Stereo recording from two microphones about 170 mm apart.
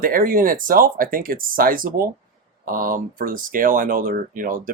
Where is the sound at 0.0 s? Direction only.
55° right (ahead or behind).